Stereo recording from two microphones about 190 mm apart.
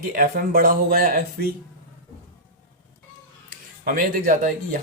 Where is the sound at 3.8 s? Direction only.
50° right (ahead or behind).